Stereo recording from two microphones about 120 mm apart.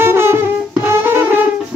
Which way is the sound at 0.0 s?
20° right (ahead or behind).